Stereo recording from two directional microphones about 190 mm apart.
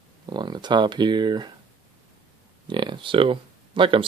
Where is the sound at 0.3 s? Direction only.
20° right (ahead or behind).